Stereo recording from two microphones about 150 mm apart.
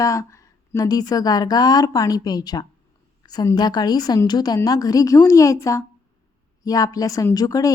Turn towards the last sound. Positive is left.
turn(degrees=25)  # may be behind; listen again after turning